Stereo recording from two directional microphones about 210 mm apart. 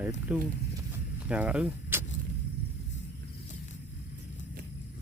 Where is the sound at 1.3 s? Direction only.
5° right (ahead or behind).